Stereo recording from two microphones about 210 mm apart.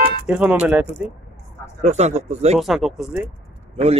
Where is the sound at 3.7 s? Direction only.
30° right (ahead or behind).